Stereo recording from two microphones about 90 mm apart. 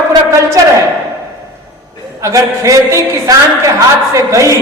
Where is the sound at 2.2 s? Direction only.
35° right (ahead or behind).